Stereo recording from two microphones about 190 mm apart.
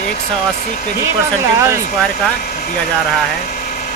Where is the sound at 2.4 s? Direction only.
45° left (ahead or behind).